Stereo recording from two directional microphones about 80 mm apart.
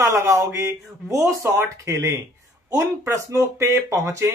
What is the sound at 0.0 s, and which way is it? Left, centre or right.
Speech, right.